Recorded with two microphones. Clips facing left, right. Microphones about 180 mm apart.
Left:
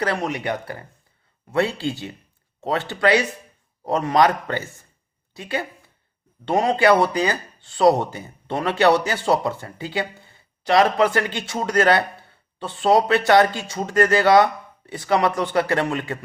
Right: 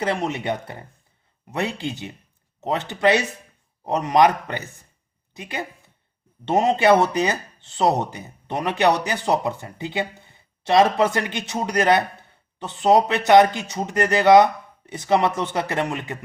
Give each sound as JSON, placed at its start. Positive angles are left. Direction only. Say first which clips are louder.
{"t": 0.0, "sound": "speech", "louder": "even", "side_deg": -25}